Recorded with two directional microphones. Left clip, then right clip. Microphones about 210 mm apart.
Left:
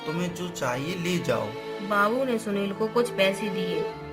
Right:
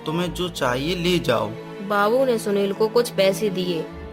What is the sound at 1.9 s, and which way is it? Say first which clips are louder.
Speech: right 5 dB; 55° right (ahead or behind).